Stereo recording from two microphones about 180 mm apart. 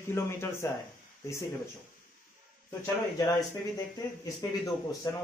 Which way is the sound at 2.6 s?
15° left (ahead or behind).